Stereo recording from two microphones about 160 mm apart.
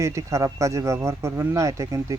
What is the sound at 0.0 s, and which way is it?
Speech, 20° right (ahead or behind).